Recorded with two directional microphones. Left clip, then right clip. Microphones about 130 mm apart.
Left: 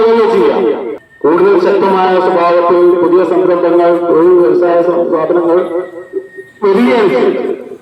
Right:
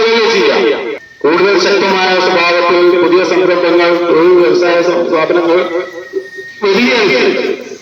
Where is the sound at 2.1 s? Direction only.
25° left (ahead or behind).